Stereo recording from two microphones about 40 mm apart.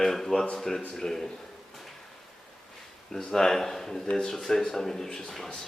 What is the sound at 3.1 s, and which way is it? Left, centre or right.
A man's voice, centre.